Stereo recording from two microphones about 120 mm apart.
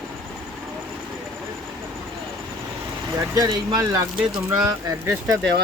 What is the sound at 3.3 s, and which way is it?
Speech, 35° right (ahead or behind).